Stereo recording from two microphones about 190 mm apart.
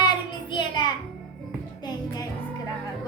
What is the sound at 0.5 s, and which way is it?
Child singing, 25° left (ahead or behind).